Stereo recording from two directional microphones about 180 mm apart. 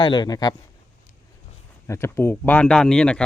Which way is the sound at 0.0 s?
25° left (ahead or behind).